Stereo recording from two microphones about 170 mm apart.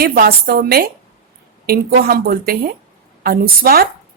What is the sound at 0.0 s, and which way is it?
Speech, 65° right (ahead or behind).